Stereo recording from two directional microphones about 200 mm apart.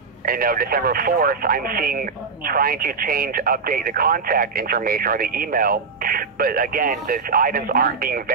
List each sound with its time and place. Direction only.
0.2 s speech: 45° right (ahead or behind)